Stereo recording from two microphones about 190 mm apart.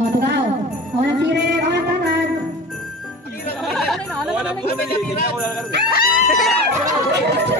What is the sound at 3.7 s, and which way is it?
Chatter, centre (ahead or behind).